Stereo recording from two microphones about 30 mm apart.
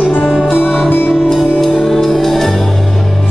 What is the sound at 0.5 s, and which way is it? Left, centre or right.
Music, left.